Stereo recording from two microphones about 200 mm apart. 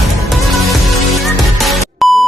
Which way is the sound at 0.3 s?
Centre (ahead or behind).